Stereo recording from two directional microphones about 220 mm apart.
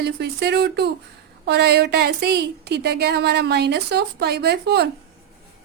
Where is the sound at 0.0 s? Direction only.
50° right (ahead or behind).